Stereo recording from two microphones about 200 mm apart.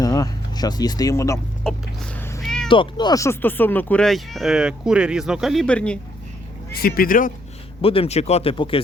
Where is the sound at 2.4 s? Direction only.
Centre (ahead or behind).